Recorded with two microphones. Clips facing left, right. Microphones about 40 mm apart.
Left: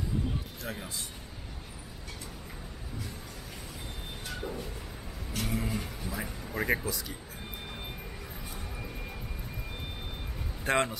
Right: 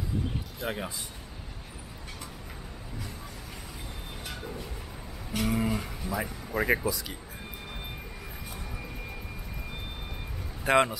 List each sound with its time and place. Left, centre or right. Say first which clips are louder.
0.6 s speech: right 7 dB; right
4.4 s a sound: left 4 dB; centre
5.3 s speech: right 5 dB; centre
10.6 s speech: right 5 dB; centre